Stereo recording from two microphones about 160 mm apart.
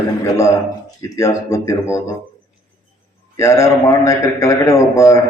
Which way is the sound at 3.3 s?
20° left (ahead or behind).